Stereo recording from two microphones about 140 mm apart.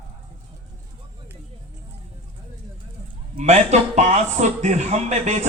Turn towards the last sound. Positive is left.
turn(degrees=-55)  # may be behind; listen again after turning